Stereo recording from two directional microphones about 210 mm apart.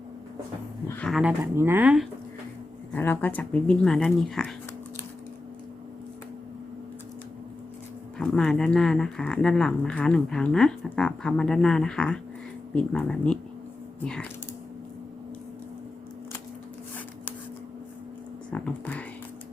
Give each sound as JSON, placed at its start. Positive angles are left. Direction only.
{"t": 0.9, "sound": "speech", "side_deg": 5}
{"t": 1.4, "sound": "speech", "side_deg": -10}
{"t": 2.9, "sound": "speech", "side_deg": 10}
{"t": 8.2, "sound": "speech", "side_deg": 5}
{"t": 18.5, "sound": "a sound", "side_deg": 5}